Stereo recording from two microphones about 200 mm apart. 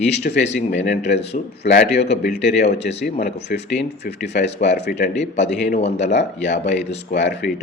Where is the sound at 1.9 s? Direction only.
55° left (ahead or behind).